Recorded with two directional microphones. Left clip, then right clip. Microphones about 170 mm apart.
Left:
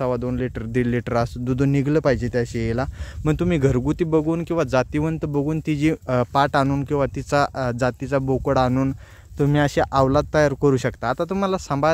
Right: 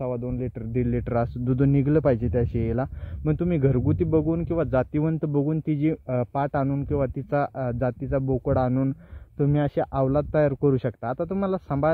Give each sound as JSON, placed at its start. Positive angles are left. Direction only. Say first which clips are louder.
{"t": 0.0, "sound": "speech", "louder": "left 6 dB", "side_deg": 55}
{"t": 0.6, "sound": "speech", "louder": "left 3 dB", "side_deg": 35}
{"t": 3.3, "sound": "speech", "louder": "left 4 dB", "side_deg": 35}